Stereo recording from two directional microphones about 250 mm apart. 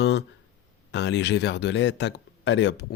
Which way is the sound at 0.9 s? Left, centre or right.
Left.